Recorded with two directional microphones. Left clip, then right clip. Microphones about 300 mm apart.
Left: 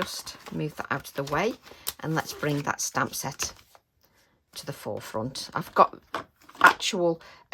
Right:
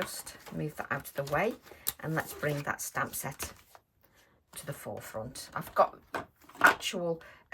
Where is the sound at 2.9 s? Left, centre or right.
Centre.